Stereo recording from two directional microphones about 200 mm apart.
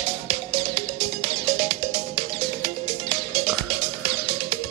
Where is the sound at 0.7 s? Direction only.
30° right (ahead or behind).